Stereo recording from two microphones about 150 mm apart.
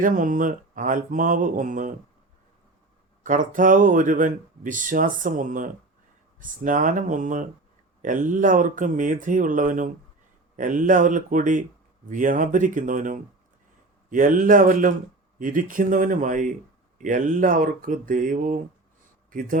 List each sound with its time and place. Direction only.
0.0 s speech: 60° right (ahead or behind)
3.2 s a man's voice: 60° right (ahead or behind)